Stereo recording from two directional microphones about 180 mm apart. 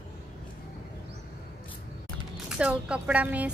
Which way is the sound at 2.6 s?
5° right (ahead or behind).